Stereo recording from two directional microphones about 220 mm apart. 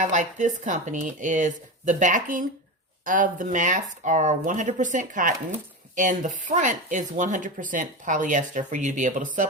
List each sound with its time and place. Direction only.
0.0 s speech: 35° right (ahead or behind)